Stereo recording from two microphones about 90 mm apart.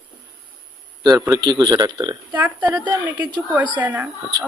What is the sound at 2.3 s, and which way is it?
Speech, 20° right (ahead or behind).